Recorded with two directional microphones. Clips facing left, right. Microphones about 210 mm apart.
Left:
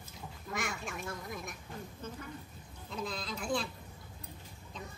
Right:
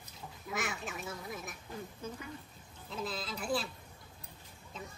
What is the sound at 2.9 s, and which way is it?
Speech, 5° right (ahead or behind).